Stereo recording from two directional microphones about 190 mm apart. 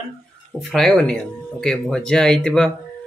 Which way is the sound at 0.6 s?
Centre (ahead or behind).